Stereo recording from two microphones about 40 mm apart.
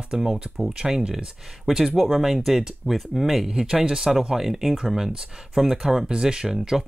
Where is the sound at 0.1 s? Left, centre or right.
Centre.